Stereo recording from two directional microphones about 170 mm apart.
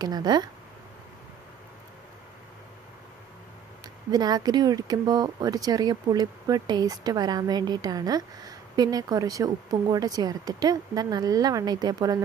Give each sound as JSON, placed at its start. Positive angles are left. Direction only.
{"t": 0.0, "sound": "speech", "side_deg": -25}
{"t": 4.1, "sound": "speech", "side_deg": -25}